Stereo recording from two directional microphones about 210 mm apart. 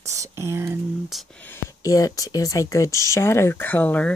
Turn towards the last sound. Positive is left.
turn(degrees=5)  # may be behind; listen again after turning